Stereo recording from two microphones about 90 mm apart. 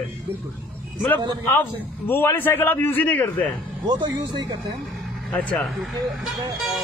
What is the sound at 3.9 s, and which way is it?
Speech, 55° right (ahead or behind).